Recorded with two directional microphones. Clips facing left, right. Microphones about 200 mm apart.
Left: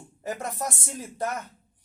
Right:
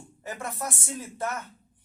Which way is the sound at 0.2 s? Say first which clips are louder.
Left 3 dB; 40° left (ahead or behind).